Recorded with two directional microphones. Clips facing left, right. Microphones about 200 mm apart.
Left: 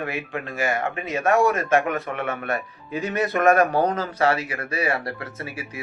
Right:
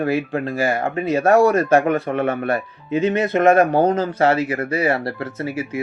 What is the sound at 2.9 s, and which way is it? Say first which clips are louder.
Speech: right 6 dB; 20° right (ahead or behind).